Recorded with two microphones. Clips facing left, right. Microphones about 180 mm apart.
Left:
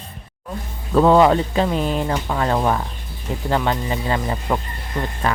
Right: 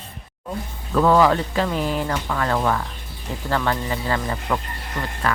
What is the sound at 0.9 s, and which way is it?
Speech, 25° left (ahead or behind).